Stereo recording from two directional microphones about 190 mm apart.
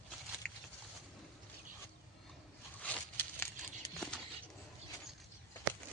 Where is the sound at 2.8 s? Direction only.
10° left (ahead or behind).